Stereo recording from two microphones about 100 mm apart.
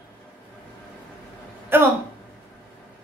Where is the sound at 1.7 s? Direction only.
20° right (ahead or behind).